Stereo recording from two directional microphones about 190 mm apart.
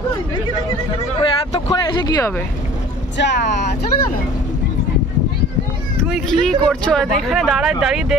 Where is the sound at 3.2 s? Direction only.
65° left (ahead or behind).